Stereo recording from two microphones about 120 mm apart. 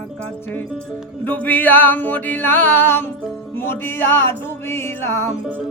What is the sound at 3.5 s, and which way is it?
Music, 20° left (ahead or behind).